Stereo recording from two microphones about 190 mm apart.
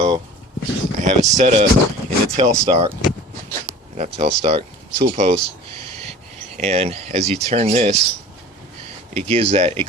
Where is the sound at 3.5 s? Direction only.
40° right (ahead or behind).